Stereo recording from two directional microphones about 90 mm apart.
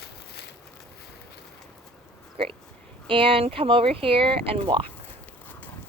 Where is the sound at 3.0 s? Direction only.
80° right.